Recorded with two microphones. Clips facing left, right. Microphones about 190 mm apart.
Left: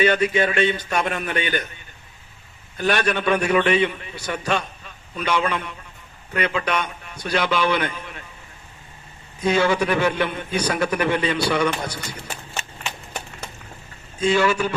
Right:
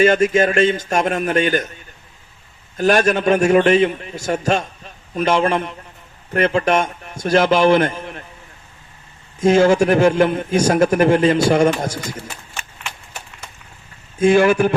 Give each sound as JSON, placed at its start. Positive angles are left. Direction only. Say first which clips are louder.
{"t": 0.0, "sound": "a man's voice", "louder": "right 5 dB", "side_deg": -45}
{"t": 2.7, "sound": "a man's voice", "louder": "right 6 dB", "side_deg": -45}
{"t": 9.4, "sound": "a man's voice", "louder": "right 7 dB", "side_deg": -45}
{"t": 14.2, "sound": "a man's voice", "louder": "right 6 dB", "side_deg": -50}